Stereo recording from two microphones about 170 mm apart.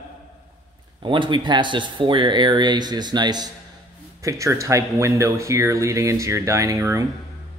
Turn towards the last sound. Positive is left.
turn(degrees=-20)  # may be behind; listen again after turning